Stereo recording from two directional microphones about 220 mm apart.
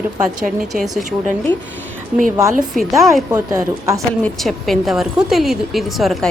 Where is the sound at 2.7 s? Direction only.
Centre (ahead or behind).